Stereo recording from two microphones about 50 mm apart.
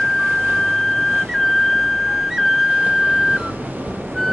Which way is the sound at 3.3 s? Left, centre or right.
Right.